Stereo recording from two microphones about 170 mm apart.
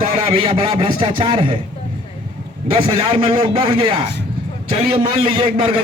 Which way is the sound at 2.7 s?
35° right (ahead or behind).